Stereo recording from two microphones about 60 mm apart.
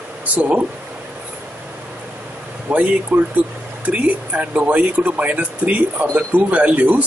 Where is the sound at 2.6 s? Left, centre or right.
Right.